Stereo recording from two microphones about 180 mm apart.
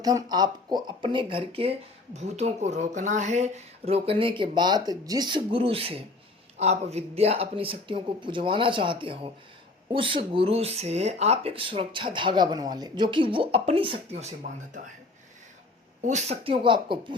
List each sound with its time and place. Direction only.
0.0 s speech: 20° right (ahead or behind); by 14.8 s 35° right (ahead or behind)
16.0 s speech: 40° right (ahead or behind)